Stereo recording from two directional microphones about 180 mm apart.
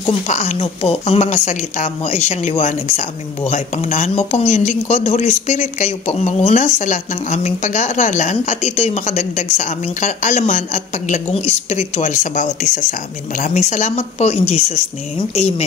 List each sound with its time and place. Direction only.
0.0 s a woman's voice: 40° left (ahead or behind)